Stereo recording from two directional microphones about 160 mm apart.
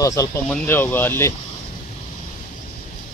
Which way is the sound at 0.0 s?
20° left (ahead or behind).